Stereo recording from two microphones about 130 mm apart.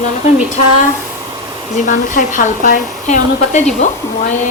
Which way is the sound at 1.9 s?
80° left.